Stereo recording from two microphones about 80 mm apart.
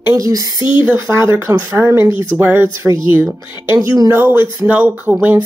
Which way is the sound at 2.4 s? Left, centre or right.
Right.